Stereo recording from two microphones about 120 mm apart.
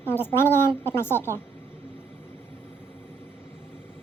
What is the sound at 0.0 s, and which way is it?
A woman's voice, 15° left (ahead or behind).